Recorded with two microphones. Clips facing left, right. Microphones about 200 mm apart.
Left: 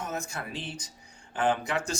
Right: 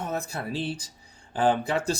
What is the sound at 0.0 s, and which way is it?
Speech, 35° right (ahead or behind).